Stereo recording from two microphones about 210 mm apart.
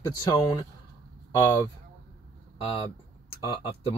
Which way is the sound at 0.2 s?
20° left (ahead or behind).